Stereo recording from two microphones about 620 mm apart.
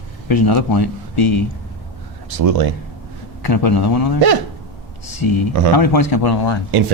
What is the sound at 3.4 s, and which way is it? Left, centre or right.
Speech, left.